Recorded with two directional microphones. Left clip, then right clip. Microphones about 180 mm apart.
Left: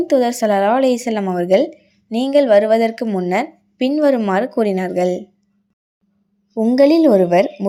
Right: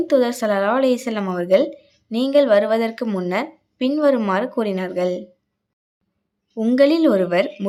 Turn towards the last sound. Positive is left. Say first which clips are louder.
# left 5 dB
turn(degrees=20)  # may be behind; listen again after turning